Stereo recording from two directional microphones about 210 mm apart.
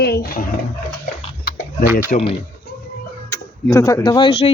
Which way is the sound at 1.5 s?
50° left (ahead or behind).